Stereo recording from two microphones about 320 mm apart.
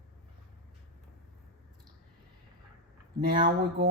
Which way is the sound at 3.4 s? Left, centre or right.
Right.